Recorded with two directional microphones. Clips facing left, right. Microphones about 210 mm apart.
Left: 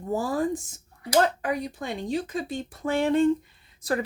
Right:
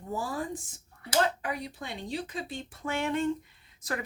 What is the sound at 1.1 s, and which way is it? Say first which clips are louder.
Speech: left 6 dB; 45° left (ahead or behind).